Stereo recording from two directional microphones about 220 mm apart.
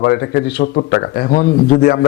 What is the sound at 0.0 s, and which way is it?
Speech, 45° left (ahead or behind).